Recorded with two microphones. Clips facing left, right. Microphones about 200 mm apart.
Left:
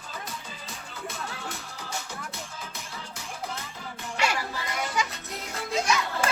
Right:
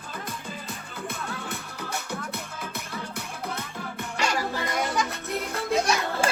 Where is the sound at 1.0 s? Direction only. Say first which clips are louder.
Right 2 dB; 55° right (ahead or behind).